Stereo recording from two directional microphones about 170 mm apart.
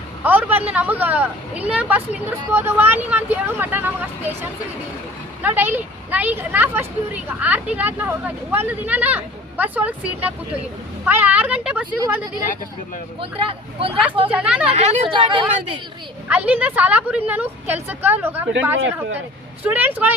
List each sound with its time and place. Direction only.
0.2 s speech: 10° right (ahead or behind)
12.0 s speech: 20° right (ahead or behind)
13.4 s speech: 35° right (ahead or behind)
14.3 s speech: 5° right (ahead or behind)
14.7 s speech: 40° right (ahead or behind)
16.3 s speech: 10° right (ahead or behind)